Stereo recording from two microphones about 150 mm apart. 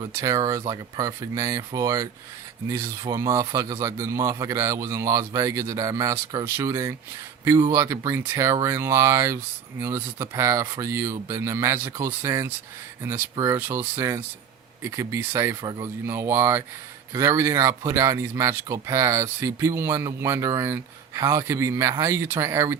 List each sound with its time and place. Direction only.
0.0 s speech: 25° right (ahead or behind)